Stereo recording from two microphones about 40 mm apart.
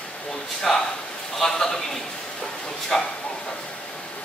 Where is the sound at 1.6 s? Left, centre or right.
Centre.